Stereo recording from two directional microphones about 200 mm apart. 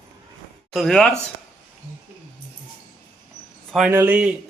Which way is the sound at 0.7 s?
Centre (ahead or behind).